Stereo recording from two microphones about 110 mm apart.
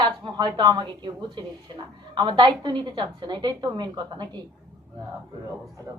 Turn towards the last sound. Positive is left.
turn(degrees=-45)  # may be behind; listen again after turning